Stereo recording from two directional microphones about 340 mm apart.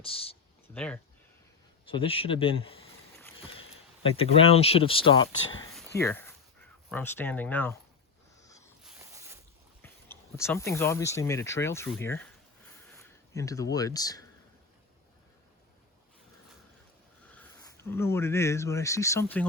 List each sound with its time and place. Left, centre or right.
0.0 s speech: centre
0.7 s speech: centre
1.9 s speech: centre
3.2 s boat: centre
3.4 s a sound: centre
4.2 s speech: centre
5.7 s a sound: centre
6.9 s speech: centre
8.4 s a sound: centre
8.8 s a sound: centre
9.8 s speech: centre
17.8 s speech: centre